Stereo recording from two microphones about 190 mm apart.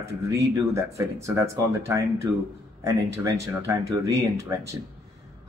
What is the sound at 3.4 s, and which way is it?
Speech, 15° right (ahead or behind).